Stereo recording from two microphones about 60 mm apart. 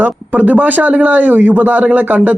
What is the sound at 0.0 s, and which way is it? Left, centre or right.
A man's voice, right.